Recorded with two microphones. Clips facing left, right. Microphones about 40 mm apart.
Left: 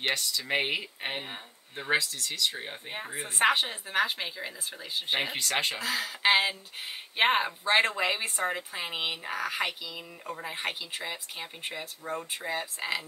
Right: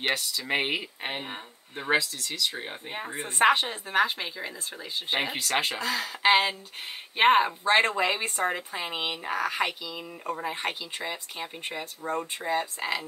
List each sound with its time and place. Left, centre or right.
0.0 s speech: centre